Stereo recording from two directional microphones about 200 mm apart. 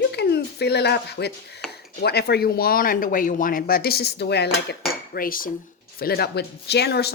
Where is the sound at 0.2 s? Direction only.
55° left (ahead or behind).